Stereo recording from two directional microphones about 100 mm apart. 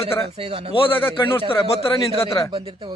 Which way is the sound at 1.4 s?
65° left (ahead or behind).